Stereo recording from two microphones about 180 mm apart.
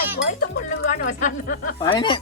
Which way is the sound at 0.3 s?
45° left (ahead or behind).